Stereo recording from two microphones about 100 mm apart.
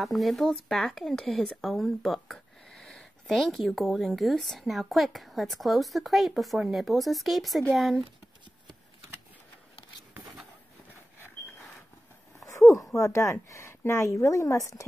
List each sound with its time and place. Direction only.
0.0 s speech: centre (ahead or behind)
12.9 s a woman's voice: 30° left (ahead or behind)